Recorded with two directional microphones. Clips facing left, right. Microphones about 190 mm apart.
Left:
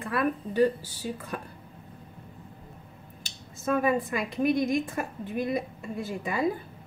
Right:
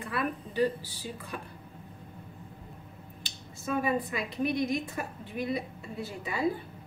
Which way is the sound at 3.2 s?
50° left (ahead or behind).